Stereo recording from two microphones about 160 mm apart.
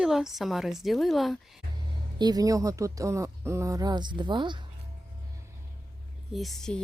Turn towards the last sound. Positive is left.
turn(degrees=5)  # may be behind; listen again after turning